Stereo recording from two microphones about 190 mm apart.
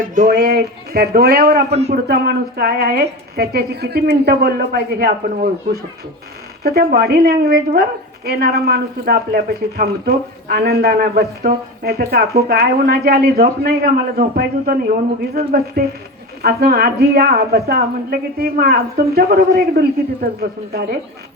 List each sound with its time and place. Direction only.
0.1 s speech: 40° right (ahead or behind)
0.3 s a woman's voice: 60° right (ahead or behind)
1.7 s speech: 35° right (ahead or behind)
2.0 s a woman's voice: 55° right (ahead or behind)